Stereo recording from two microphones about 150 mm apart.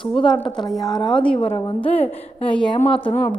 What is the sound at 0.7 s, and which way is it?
Speech, centre (ahead or behind).